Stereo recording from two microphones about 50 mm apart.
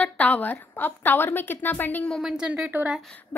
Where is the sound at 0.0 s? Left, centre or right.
Left.